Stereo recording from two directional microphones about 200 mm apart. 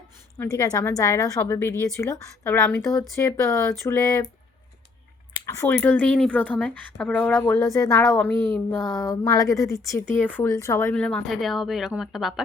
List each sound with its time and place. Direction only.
0.3 s speech: 15° left (ahead or behind)
5.5 s speech: 15° left (ahead or behind)